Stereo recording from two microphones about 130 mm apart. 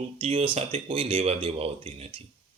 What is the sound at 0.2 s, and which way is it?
A man's voice, 45° right (ahead or behind).